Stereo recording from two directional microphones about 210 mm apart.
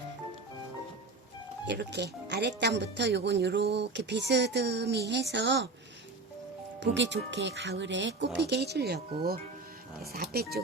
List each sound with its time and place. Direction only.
1.6 s speech: 55° right (ahead or behind)
6.7 s speech: 55° right (ahead or behind)
10.0 s speech: 45° right (ahead or behind)